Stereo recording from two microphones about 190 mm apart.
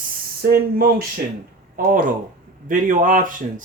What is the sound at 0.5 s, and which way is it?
Speech, 55° right (ahead or behind).